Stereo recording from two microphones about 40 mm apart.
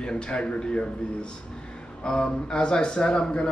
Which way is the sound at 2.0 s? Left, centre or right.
Centre.